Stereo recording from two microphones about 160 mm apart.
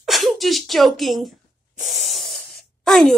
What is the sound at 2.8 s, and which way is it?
Groan, 5° left (ahead or behind).